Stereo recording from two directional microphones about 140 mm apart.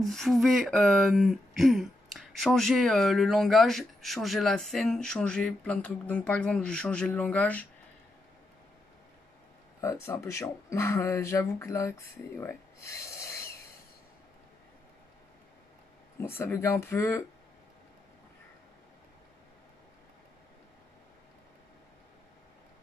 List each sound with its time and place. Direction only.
0.0 s speech: centre (ahead or behind)
9.8 s speech: 20° left (ahead or behind)
16.2 s speech: 15° left (ahead or behind)